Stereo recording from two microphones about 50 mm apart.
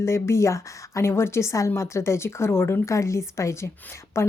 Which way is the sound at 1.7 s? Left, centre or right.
Left.